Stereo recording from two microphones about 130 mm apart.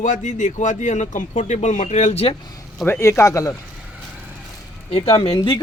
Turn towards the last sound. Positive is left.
turn(degrees=45)  # may be behind; listen again after turning